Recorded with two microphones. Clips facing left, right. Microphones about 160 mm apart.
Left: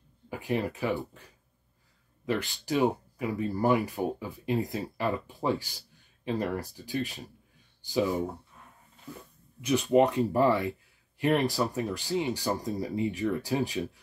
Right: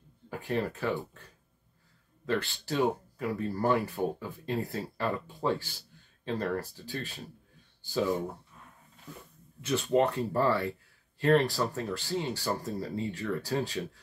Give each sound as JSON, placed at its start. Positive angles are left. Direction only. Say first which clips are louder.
{"t": 0.3, "sound": "speech", "louder": "left 1 dB", "side_deg": 15}
{"t": 2.2, "sound": "speech", "louder": "left 1 dB", "side_deg": 15}
{"t": 9.6, "sound": "speech", "louder": "left 3 dB", "side_deg": 15}